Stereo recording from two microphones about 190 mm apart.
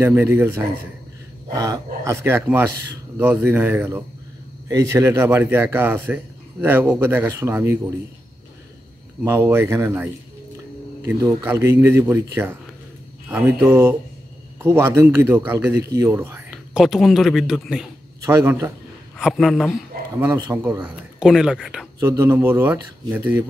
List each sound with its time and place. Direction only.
0.0 s speech: 10° right (ahead or behind)
9.2 s speech: 10° right (ahead or behind)
11.1 s speech: 10° right (ahead or behind)
18.2 s speech: 15° right (ahead or behind)
19.1 s a man's voice: centre (ahead or behind)
20.2 s speech: 15° right (ahead or behind)
22.0 s speech: 15° right (ahead or behind)